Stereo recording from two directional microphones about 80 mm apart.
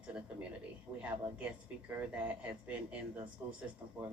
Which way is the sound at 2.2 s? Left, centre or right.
Centre.